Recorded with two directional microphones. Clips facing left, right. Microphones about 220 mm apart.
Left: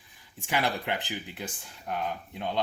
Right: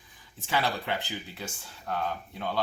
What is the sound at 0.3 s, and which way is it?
Speech, 15° left (ahead or behind).